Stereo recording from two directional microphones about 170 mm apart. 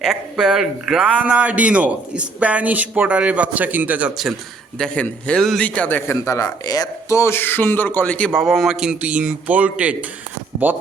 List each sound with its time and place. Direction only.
0.0 s a man's voice: 5° right (ahead or behind)
4.8 s a man's voice: 10° left (ahead or behind)